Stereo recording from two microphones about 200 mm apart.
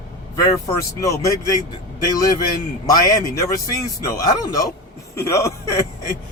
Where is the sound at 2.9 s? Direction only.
15° left (ahead or behind).